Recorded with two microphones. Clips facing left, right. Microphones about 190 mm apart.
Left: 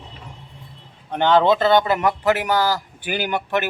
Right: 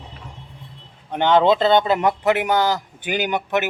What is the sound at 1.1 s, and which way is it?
Speech, 15° right (ahead or behind).